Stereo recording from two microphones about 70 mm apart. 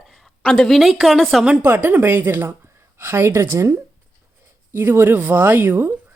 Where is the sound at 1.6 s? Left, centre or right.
Right.